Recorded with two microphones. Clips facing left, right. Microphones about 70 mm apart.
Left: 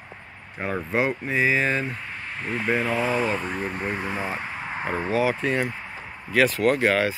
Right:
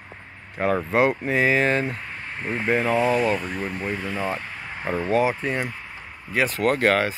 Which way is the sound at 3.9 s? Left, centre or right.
Left.